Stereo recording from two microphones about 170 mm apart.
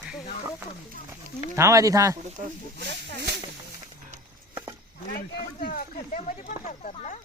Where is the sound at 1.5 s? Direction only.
20° right (ahead or behind).